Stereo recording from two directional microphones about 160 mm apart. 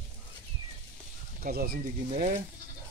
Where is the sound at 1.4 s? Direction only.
65° right (ahead or behind).